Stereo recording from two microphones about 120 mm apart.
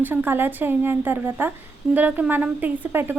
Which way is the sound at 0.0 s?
15° right (ahead or behind).